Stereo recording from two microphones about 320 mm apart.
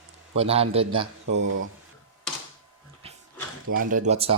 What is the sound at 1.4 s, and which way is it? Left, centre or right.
Speech, right.